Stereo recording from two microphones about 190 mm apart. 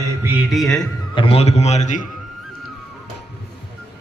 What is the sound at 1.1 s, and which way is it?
Speech, 25° left (ahead or behind).